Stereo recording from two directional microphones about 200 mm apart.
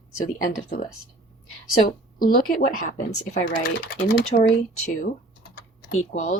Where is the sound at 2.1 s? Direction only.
45° left (ahead or behind).